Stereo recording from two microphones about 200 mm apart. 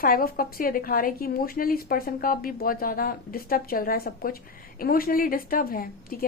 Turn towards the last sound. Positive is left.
turn(degrees=45)  # may be behind; listen again after turning